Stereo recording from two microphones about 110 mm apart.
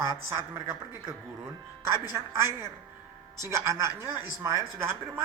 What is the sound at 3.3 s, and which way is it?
A woman's voice, 25° right (ahead or behind).